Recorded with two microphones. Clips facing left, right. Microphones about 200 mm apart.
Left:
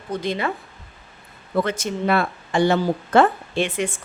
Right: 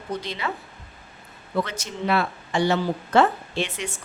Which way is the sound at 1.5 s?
50° left (ahead or behind).